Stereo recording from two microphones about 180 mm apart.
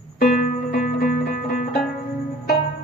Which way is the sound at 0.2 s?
50° left (ahead or behind).